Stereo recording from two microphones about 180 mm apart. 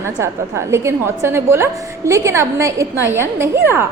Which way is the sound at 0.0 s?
15° right (ahead or behind).